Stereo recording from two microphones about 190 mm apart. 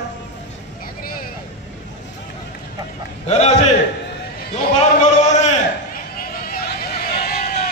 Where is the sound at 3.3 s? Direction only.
35° left (ahead or behind).